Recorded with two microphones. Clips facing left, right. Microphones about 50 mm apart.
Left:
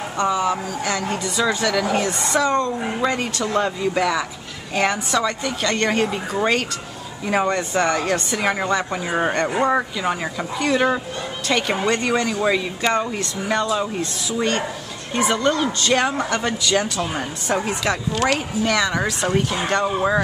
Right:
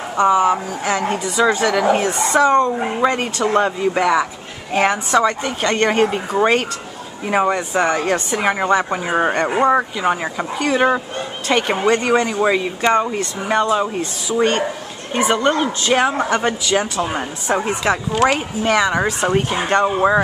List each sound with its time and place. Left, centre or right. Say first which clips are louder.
0.2 s speech: right 6 dB; centre
7.2 s speech: right 3 dB; centre; by 15.7 s right
15.8 s speech: right 3 dB; centre
16.2 s speech: right 4 dB; right